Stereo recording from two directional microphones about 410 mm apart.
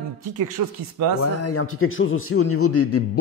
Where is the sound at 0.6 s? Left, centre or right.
Right.